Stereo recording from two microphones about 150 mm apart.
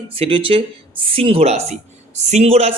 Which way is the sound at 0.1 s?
35° right (ahead or behind).